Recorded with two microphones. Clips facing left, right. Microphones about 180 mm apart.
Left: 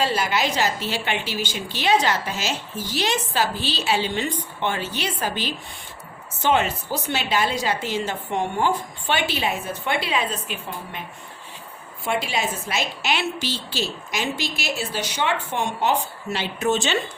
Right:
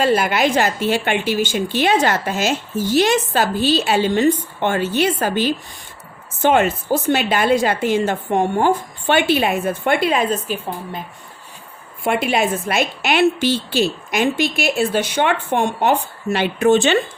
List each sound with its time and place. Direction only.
0.0 s a woman's voice: 55° right (ahead or behind)
12.0 s a woman's voice: 55° right (ahead or behind)